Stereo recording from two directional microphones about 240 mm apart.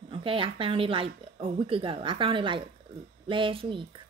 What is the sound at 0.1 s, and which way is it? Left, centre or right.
Speech, right.